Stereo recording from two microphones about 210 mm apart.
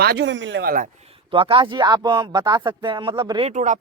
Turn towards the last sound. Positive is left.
turn(degrees=-35)  # may be behind; listen again after turning